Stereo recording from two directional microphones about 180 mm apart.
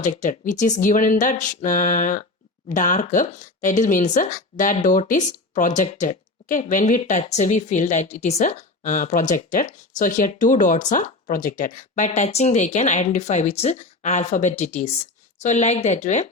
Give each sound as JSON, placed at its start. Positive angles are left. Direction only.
{"t": 0.0, "sound": "speech", "side_deg": 45}